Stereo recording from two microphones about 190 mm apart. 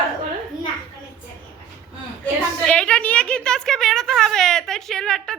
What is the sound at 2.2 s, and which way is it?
A woman's voice, 5° left (ahead or behind).